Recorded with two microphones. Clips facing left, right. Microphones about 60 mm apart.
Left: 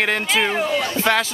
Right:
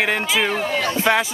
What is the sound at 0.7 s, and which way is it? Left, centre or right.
Speech, right.